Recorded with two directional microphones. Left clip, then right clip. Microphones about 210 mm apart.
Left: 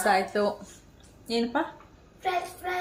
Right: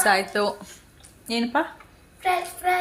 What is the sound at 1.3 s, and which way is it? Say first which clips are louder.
Speech: right 3 dB; 35° right (ahead or behind).